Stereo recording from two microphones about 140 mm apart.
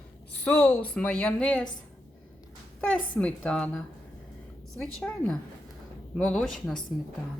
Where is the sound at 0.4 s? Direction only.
10° left (ahead or behind).